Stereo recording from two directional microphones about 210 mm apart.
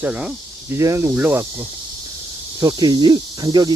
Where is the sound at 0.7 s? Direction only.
15° right (ahead or behind).